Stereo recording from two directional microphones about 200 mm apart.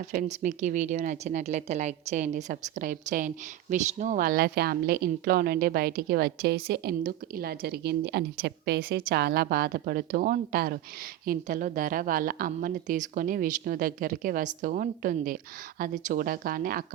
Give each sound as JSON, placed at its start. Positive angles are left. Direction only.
{"t": 0.0, "sound": "speech", "side_deg": -35}